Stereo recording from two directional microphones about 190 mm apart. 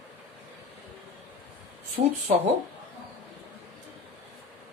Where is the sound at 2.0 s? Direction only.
40° right (ahead or behind).